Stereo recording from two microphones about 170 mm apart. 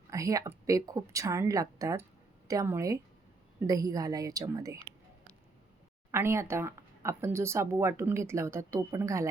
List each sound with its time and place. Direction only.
0.1 s a woman's voice: 20° right (ahead or behind)
6.1 s speech: 15° right (ahead or behind)